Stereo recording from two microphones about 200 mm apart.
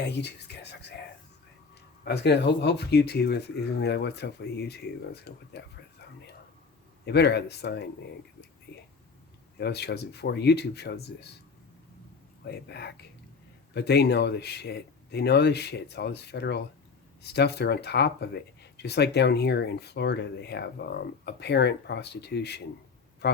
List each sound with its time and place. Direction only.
0.0 s speech: 55° left (ahead or behind)
2.0 s speech: 55° left (ahead or behind)
12.5 s speech: 55° left (ahead or behind)